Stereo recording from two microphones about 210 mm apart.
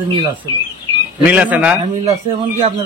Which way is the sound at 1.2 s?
5° right (ahead or behind).